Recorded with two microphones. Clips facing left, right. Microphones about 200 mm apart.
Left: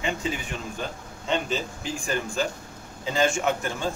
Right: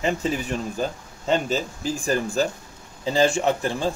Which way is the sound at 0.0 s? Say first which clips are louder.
Right 5 dB; 40° right (ahead or behind).